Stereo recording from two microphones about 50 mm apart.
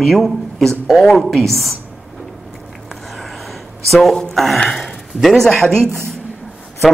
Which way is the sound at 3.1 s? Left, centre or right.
Centre.